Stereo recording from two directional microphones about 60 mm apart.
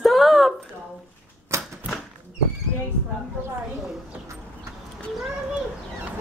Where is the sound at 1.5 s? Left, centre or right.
Right.